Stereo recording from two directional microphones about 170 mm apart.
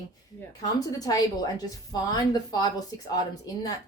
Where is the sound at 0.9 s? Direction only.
20° left (ahead or behind).